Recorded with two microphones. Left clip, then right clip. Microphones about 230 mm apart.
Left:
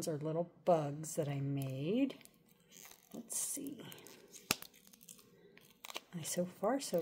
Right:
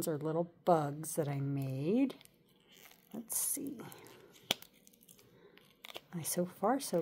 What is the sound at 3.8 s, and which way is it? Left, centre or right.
Speech, centre.